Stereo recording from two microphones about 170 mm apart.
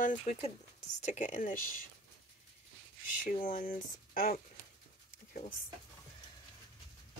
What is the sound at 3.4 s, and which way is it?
Speech, 55° left (ahead or behind).